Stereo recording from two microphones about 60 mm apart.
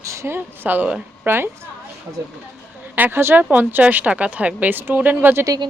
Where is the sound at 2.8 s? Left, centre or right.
Right.